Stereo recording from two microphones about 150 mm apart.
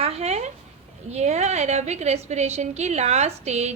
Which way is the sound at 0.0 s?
45° right (ahead or behind).